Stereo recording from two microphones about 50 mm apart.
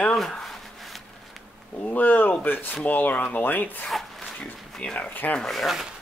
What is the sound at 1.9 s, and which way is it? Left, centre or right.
A man's voice, left.